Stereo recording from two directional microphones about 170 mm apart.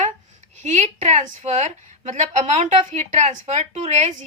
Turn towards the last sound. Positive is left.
turn(degrees=-45)  # may be behind; listen again after turning